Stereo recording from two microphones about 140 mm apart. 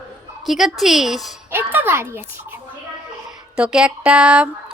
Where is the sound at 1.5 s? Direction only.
15° right (ahead or behind).